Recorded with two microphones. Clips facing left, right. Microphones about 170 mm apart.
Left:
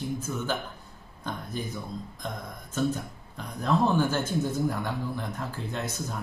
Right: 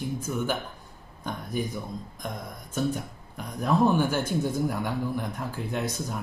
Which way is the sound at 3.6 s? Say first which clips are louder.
Right 2 dB; 10° right (ahead or behind).